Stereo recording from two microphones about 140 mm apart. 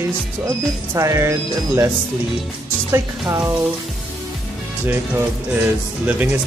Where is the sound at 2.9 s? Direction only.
20° right (ahead or behind).